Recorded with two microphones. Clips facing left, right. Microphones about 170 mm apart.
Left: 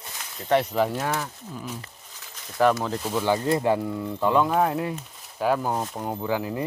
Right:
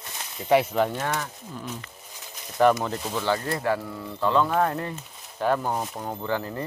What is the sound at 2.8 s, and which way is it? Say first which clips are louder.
Speech: left 2 dB; centre (ahead or behind).